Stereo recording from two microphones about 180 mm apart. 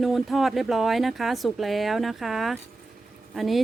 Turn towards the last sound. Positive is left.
turn(degrees=0)  # may be behind; listen again after turning